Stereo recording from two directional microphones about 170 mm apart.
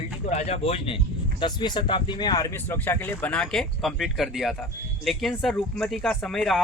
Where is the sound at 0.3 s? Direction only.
40° left (ahead or behind).